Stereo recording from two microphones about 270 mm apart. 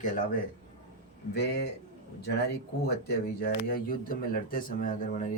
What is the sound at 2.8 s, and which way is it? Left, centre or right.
Speech, left.